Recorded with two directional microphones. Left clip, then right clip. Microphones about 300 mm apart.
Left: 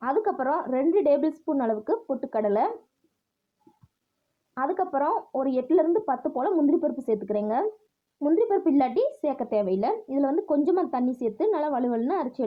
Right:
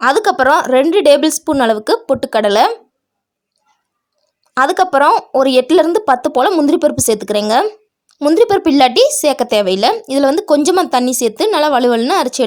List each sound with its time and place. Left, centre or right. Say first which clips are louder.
0.0 s a woman's voice: right 14 dB; right
4.5 s a woman's voice: right 15 dB; right